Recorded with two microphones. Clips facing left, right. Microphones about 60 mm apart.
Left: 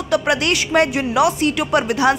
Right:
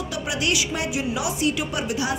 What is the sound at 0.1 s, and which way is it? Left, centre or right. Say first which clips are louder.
A woman's voice: left 9 dB; left.